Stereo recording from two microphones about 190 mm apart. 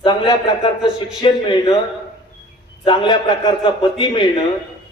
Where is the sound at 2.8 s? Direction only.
25° left (ahead or behind).